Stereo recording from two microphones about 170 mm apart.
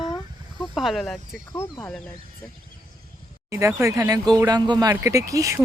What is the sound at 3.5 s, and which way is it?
Speech, 15° right (ahead or behind).